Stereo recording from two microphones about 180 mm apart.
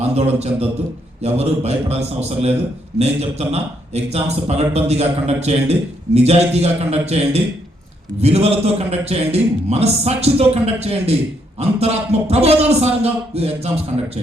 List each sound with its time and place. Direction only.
0.0 s a man's voice: 35° right (ahead or behind)